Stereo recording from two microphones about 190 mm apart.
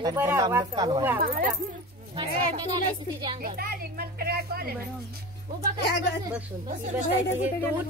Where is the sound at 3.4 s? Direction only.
50° right (ahead or behind).